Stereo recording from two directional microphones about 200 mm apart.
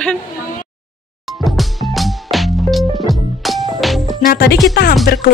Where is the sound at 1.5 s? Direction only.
Centre (ahead or behind).